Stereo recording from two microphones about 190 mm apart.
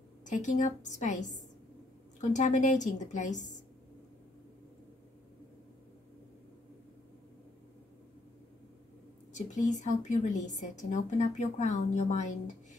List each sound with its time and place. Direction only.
0.2 s a woman's voice: 40° left (ahead or behind)
9.3 s a woman's voice: 40° left (ahead or behind)